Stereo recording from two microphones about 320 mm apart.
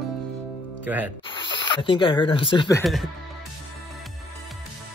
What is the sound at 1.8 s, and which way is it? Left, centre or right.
Speech, centre.